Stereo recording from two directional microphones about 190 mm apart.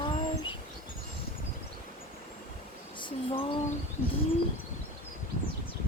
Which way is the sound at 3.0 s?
25° left (ahead or behind).